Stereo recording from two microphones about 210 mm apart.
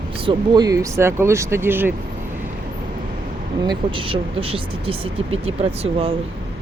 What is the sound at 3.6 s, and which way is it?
Speech, 20° right (ahead or behind).